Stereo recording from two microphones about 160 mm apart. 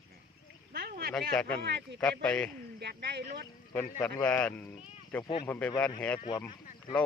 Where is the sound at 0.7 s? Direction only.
75° right (ahead or behind).